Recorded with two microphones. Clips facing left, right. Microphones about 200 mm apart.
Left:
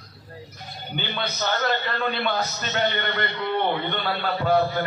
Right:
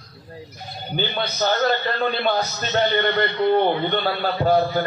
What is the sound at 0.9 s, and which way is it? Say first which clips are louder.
A man's voice: right 5 dB; 40° right (ahead or behind).